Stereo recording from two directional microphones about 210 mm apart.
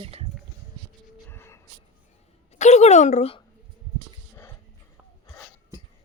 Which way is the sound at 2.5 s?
30° left (ahead or behind).